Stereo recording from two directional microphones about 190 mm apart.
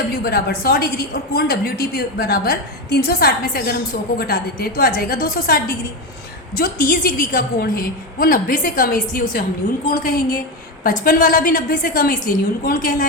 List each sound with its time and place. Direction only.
0.2 s a woman's voice: 55° left (ahead or behind)